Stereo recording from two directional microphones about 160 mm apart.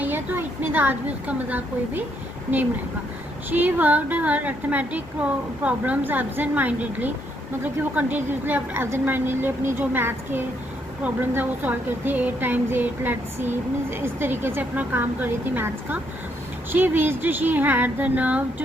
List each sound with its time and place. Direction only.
0.0 s speech: 10° right (ahead or behind)
3.5 s speech: 10° right (ahead or behind)